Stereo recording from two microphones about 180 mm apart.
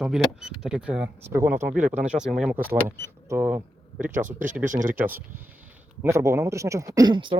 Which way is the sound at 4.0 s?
45° right (ahead or behind).